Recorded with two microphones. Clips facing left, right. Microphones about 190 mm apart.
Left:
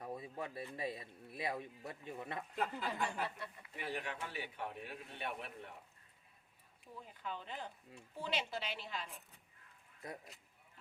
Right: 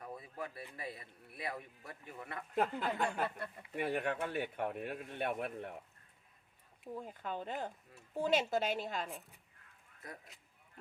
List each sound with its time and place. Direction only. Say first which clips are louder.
0.0 s speech: left 1 dB; 25° left (ahead or behind)
2.6 s speech: right 6 dB; 55° right (ahead or behind)
6.9 s speech: right 5 dB; 50° right (ahead or behind)